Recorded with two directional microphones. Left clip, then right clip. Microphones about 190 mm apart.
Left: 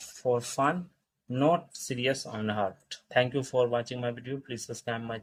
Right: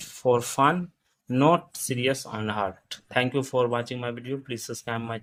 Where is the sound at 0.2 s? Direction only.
40° right (ahead or behind).